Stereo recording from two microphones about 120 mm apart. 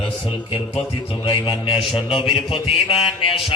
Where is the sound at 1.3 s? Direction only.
50° left (ahead or behind).